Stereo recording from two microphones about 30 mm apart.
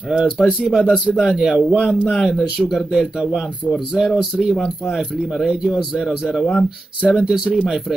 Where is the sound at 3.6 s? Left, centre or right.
Right.